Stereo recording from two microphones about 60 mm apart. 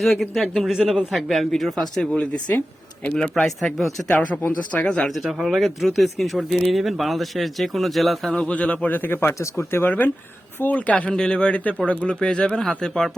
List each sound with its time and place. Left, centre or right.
0.0 s speech: centre
3.3 s speech: centre
4.4 s speech: left
5.0 s speech: centre
8.3 s speech: centre
8.9 s speech: left
9.4 s speech: left
9.8 s speech: left; by 13.1 s centre